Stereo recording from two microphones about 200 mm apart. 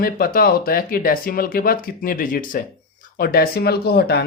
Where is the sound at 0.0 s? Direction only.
50° left (ahead or behind).